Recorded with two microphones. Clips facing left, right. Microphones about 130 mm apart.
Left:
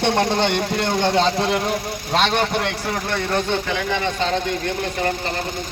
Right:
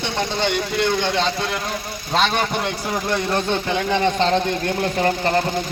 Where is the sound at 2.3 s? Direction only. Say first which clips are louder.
Left 1 dB; 10° right (ahead or behind).